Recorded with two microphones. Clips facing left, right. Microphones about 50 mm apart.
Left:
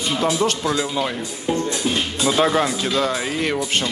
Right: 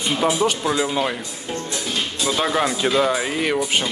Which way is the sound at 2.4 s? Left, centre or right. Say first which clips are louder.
Left 3 dB; centre.